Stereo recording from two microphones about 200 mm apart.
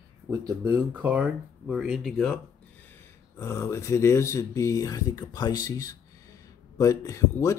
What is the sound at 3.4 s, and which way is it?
Speech, 15° left (ahead or behind).